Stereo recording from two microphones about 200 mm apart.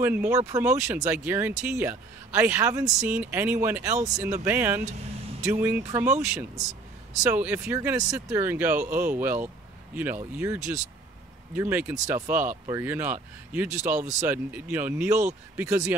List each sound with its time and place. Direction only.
0.0 s speech: 10° right (ahead or behind)
7.2 s speech: 10° right (ahead or behind)